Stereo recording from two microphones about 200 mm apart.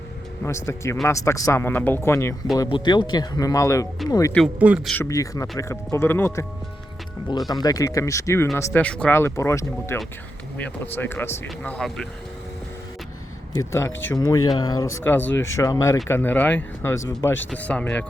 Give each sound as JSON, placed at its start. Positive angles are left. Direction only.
{"t": 0.4, "sound": "speech", "side_deg": 15}
{"t": 4.6, "sound": "speech", "side_deg": -5}
{"t": 4.9, "sound": "speech", "side_deg": 15}
{"t": 13.5, "sound": "speech", "side_deg": 15}